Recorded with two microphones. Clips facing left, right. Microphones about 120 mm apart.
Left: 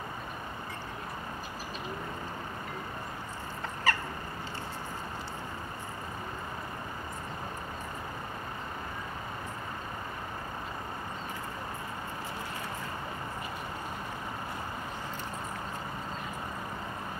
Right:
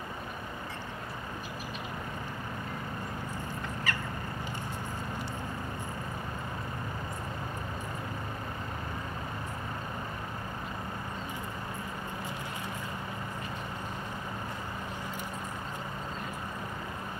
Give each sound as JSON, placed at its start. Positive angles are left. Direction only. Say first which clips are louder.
{"t": 3.9, "sound": "bird", "louder": "left 7 dB", "side_deg": 35}